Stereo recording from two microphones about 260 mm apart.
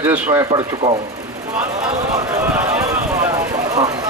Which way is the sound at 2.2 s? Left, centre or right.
Centre.